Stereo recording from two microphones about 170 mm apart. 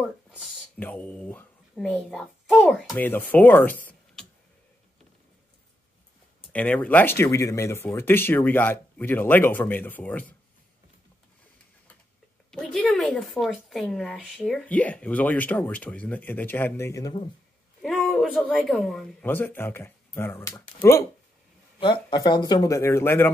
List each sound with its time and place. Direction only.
0.7 s speech: 10° left (ahead or behind)
3.0 s speech: 10° left (ahead or behind)
3.8 s tick-tock: 5° left (ahead or behind)
6.5 s speech: 10° left (ahead or behind)
12.4 s speech: centre (ahead or behind); by 17.2 s 20° left (ahead or behind)
17.8 s speech: centre (ahead or behind)
19.2 s speech: 10° left (ahead or behind)
21.7 s a man's voice: 25° left (ahead or behind)